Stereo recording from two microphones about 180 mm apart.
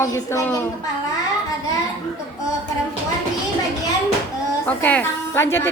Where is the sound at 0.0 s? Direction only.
15° left (ahead or behind).